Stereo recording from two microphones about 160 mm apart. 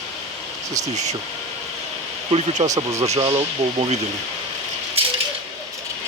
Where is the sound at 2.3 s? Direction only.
40° right (ahead or behind).